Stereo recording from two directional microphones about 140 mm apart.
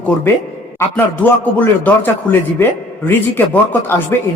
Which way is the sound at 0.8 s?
15° left (ahead or behind).